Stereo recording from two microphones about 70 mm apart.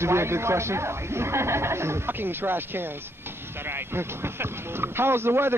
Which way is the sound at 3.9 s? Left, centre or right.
Right.